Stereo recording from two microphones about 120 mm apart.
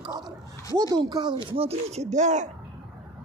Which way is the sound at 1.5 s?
55° right (ahead or behind).